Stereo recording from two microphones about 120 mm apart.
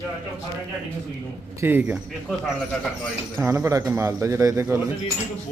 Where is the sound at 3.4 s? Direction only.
25° right (ahead or behind).